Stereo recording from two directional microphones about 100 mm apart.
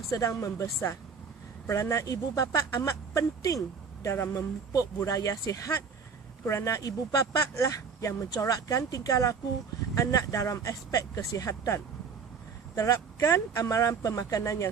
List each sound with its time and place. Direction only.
0.1 s speech: 30° left (ahead or behind)
4.7 s speech: 35° left (ahead or behind)